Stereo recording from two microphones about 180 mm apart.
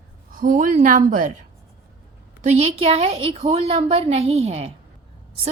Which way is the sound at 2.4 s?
35° right (ahead or behind).